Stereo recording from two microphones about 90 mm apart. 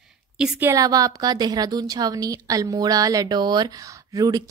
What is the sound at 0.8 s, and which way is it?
A woman's voice, 40° right (ahead or behind).